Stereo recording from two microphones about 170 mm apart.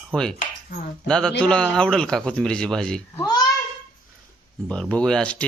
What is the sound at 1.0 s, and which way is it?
Speech, 5° left (ahead or behind).